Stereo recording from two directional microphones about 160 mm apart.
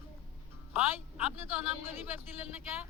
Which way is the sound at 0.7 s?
10° right (ahead or behind).